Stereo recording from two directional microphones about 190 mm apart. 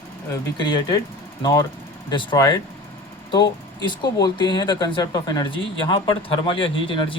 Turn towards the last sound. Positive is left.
turn(degrees=25)  # may be behind; listen again after turning